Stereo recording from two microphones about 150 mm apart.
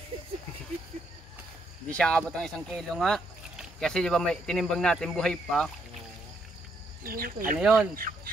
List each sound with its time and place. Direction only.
1.9 s speech: 5° left (ahead or behind)
7.0 s speech: 75° right (ahead or behind)
7.6 s speech: 5° right (ahead or behind)